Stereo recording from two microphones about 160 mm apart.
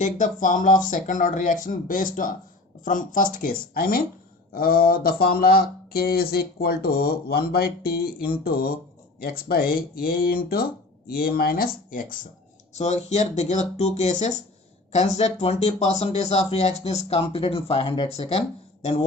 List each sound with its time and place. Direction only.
0.0 s speech: 55° left (ahead or behind)
12.7 s speech: 45° left (ahead or behind)